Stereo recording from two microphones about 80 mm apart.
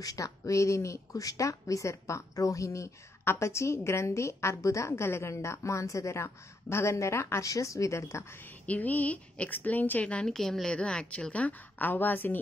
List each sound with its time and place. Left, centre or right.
0.0 s speech: left
8.6 s a woman's voice: centre